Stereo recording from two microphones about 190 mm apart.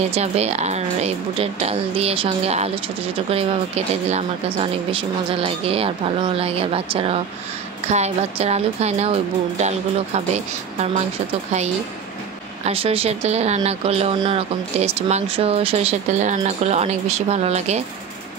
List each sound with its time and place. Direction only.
0.1 s speech: 35° right (ahead or behind)
12.6 s speech: 30° right (ahead or behind)